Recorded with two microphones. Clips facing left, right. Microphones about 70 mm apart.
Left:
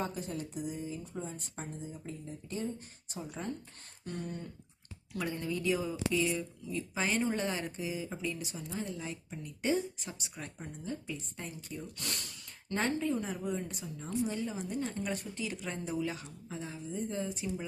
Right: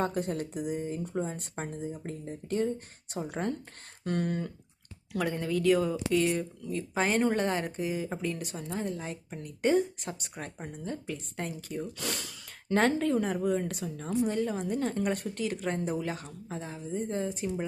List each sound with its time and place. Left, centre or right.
0.0 s speech: right
4.0 s speech: right
5.1 s speech: right
14.3 s speech: right